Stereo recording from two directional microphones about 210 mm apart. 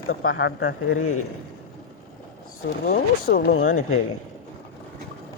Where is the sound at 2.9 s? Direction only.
45° left (ahead or behind).